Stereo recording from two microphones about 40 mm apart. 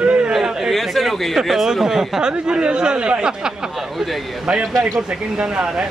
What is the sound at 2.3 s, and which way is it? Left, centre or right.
Speech, right.